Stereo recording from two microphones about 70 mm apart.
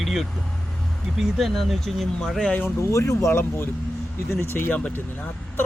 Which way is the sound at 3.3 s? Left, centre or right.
Left.